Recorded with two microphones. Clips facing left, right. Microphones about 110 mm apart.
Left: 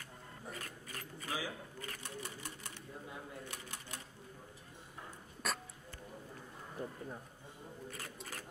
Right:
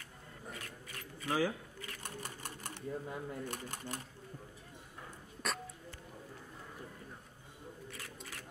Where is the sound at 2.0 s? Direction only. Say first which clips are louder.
Right 1 dB; 45° right (ahead or behind).